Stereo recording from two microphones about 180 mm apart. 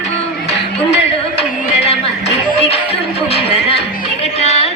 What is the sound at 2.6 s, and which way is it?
Music, 35° left (ahead or behind).